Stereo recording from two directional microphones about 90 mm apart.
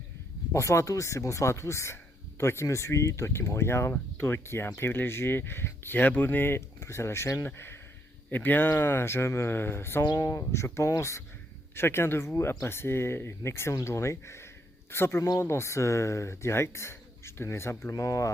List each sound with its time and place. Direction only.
0.5 s speech: 35° left (ahead or behind)
10.1 s a man's voice: 40° left (ahead or behind)